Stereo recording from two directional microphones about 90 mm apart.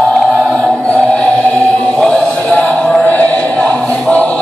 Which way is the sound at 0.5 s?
10° left (ahead or behind).